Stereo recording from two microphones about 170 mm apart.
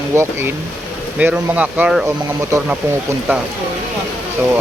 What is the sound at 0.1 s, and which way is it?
Speech, 15° right (ahead or behind).